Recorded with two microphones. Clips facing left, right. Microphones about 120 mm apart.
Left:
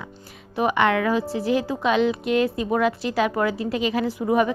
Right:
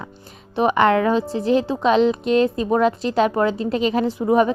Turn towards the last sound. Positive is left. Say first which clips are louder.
# right 4 dB
turn(degrees=-35)  # may be behind; listen again after turning